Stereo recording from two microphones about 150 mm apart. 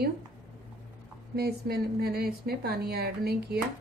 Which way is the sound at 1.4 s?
90° right.